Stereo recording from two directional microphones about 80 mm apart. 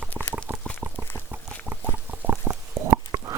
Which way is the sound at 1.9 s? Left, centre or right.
Right.